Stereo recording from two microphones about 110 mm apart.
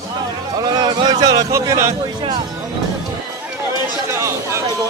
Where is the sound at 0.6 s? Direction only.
40° right (ahead or behind).